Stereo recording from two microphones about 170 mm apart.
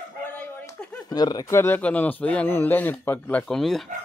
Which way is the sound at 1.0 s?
25° left (ahead or behind).